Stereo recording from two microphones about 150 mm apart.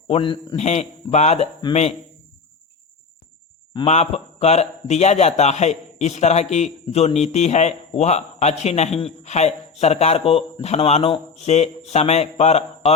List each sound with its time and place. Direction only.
0.1 s a man's voice: 35° left (ahead or behind)
0.6 s a man's voice: 45° left (ahead or behind)
3.8 s a man's voice: 45° left (ahead or behind)